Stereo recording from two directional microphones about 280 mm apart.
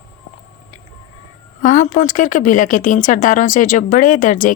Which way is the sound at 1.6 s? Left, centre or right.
Left.